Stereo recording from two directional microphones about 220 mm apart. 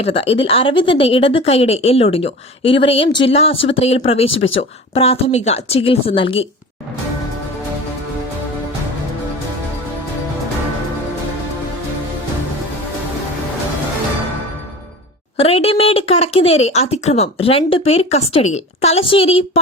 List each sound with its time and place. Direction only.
0.0 s speech: 25° left (ahead or behind)
15.4 s speech: 25° left (ahead or behind)